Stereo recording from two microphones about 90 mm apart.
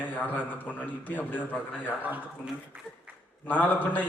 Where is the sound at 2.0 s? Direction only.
20° right (ahead or behind).